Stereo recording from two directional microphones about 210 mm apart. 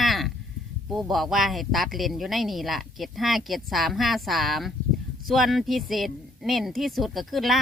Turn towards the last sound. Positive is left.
turn(degrees=0)  # may be behind; listen again after turning